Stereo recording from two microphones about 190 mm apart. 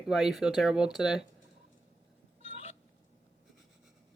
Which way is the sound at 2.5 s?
35° left (ahead or behind).